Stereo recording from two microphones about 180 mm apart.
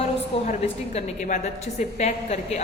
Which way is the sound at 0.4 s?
40° left (ahead or behind).